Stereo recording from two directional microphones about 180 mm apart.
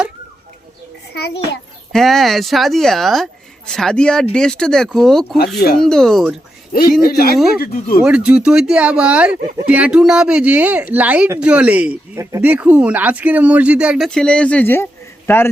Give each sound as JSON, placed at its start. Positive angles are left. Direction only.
{"t": 1.1, "sound": "a sound", "side_deg": 65}
{"t": 1.9, "sound": "speech", "side_deg": 0}
{"t": 7.0, "sound": "speech", "side_deg": 60}
{"t": 8.0, "sound": "a man's voice", "side_deg": -5}